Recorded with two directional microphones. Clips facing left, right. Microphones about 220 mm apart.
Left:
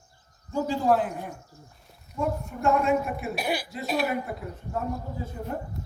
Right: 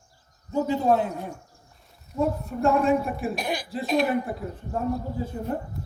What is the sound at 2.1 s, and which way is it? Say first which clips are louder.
Speech: right 4 dB; 35° right (ahead or behind).